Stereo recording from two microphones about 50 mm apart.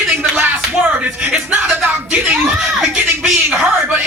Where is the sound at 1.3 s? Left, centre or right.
Right.